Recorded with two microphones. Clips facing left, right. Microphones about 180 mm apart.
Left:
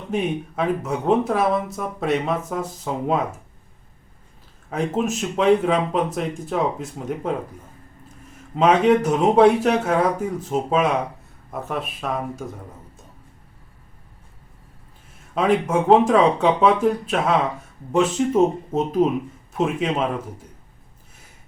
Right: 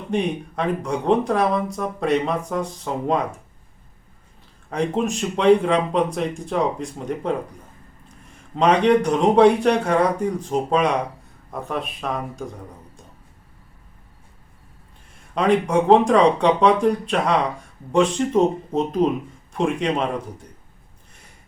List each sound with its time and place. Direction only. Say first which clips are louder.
0.1 s speech: right 1 dB; 5° left (ahead or behind)
4.7 s speech: right 1 dB; 5° left (ahead or behind)
8.5 s speech: even; 5° left (ahead or behind)
15.4 s speech: right 1 dB; 5° left (ahead or behind)